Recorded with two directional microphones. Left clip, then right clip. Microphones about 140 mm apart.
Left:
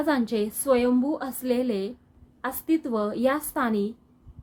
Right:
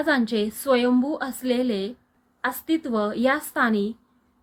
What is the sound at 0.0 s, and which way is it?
A woman's voice, 20° left (ahead or behind).